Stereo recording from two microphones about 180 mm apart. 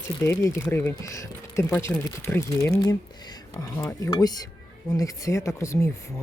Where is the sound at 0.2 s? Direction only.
15° left (ahead or behind).